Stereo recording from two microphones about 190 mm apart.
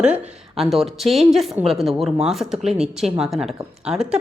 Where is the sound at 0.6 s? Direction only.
Centre (ahead or behind).